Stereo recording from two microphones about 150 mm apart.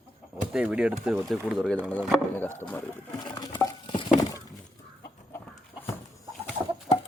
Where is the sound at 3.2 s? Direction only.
30° left (ahead or behind).